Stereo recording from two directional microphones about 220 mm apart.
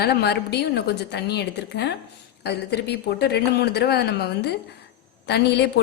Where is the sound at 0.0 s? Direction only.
45° left (ahead or behind).